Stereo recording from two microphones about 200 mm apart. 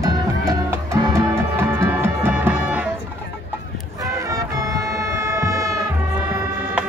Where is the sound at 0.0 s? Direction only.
15° right (ahead or behind).